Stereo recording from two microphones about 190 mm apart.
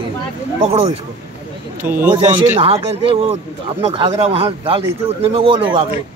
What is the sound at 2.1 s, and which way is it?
Speech, 25° right (ahead or behind).